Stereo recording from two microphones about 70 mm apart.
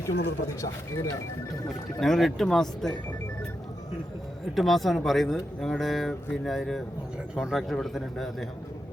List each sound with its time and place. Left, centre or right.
0.0 s speech: left
2.0 s speech: centre
4.5 s speech: centre